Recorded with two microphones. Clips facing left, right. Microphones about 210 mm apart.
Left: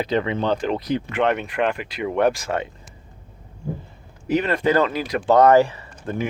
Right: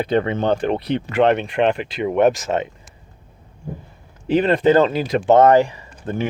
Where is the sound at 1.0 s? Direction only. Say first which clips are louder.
Right 5 dB; 30° right (ahead or behind).